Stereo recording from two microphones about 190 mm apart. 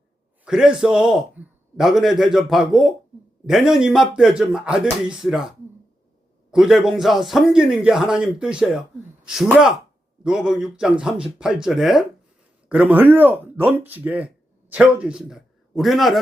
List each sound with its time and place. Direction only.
0.4 s a man's voice: 5° right (ahead or behind)